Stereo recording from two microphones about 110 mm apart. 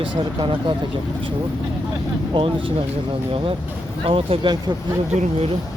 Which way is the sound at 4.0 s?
55° right (ahead or behind).